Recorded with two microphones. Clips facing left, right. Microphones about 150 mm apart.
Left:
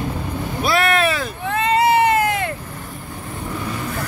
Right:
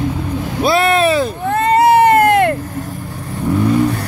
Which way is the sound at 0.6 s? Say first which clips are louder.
Right 5 dB; 25° right (ahead or behind).